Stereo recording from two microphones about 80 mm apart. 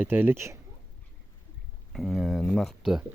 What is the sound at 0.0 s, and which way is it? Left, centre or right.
Speech, right.